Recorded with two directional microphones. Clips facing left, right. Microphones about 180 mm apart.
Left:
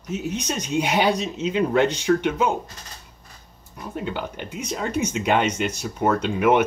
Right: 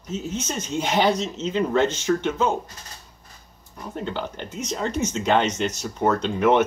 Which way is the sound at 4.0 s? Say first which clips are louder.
Even; 10° left (ahead or behind).